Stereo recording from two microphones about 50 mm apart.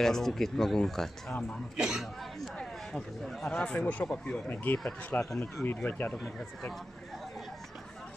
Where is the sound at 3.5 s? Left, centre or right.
Left.